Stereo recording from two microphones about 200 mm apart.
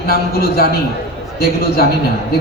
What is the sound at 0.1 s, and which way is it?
Speech, 50° left (ahead or behind).